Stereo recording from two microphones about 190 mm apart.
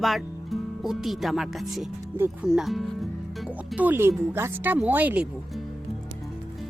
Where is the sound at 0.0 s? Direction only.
Centre (ahead or behind).